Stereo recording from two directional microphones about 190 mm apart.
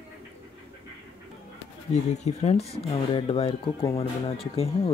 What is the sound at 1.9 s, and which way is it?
Speech, 35° left (ahead or behind).